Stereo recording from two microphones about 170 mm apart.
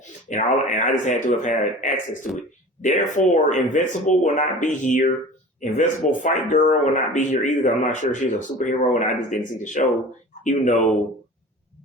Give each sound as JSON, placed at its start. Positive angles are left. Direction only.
{"t": 0.3, "sound": "speech", "side_deg": 45}